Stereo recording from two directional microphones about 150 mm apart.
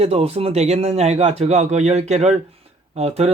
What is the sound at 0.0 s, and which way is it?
Speech, 45° right (ahead or behind).